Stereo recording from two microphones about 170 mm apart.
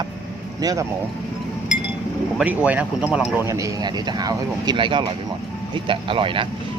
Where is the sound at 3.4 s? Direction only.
20° right (ahead or behind).